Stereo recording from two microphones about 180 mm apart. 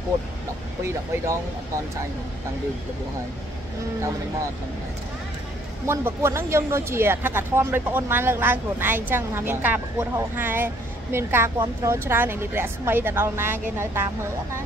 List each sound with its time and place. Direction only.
0.8 s speech: 15° right (ahead or behind)
5.9 s speech: 15° right (ahead or behind)